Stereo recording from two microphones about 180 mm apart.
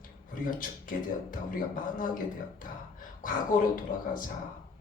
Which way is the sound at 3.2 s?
50° left (ahead or behind).